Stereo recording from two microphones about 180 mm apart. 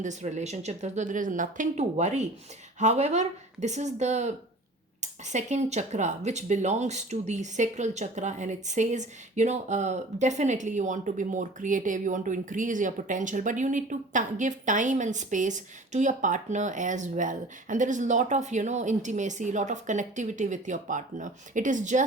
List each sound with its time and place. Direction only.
0.0 s speech: 40° right (ahead or behind)